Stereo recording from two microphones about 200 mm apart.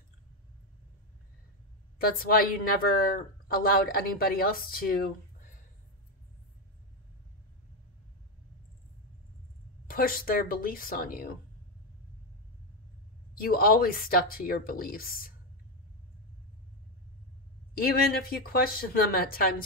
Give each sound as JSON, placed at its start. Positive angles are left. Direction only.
{"t": 2.1, "sound": "speech", "side_deg": 50}
{"t": 9.8, "sound": "speech", "side_deg": 45}
{"t": 13.3, "sound": "speech", "side_deg": 45}
{"t": 17.7, "sound": "speech", "side_deg": 45}